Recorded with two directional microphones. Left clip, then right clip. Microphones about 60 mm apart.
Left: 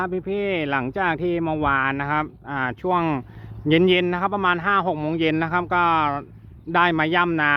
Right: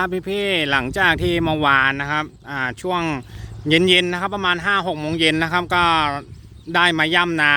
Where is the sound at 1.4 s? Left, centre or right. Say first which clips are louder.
Right 4 dB; right.